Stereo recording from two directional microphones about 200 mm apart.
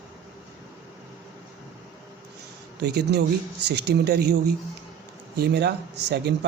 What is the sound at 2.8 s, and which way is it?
Speech, 55° right (ahead or behind).